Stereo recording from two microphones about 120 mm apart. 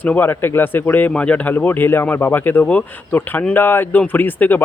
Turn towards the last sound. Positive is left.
turn(degrees=15)  # may be behind; listen again after turning